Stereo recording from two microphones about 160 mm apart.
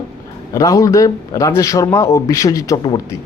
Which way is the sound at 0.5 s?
20° left (ahead or behind).